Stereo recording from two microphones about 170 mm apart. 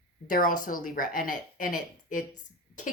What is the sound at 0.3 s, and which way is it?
Speech, 55° left (ahead or behind).